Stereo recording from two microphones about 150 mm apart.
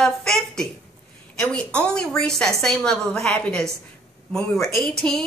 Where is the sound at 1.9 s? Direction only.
5° left (ahead or behind).